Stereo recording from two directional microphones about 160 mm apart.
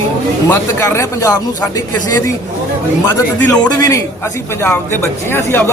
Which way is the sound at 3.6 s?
20° left (ahead or behind).